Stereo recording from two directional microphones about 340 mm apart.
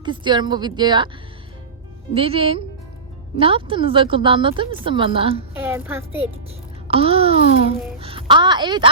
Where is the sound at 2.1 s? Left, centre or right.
Centre.